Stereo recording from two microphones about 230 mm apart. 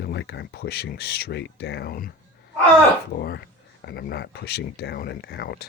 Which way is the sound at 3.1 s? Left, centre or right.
Left.